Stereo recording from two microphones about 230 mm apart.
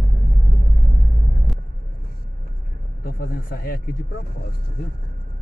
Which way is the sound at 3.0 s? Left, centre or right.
Left.